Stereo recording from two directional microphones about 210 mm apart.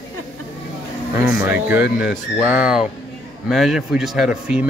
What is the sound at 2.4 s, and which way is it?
Speech, 5° right (ahead or behind).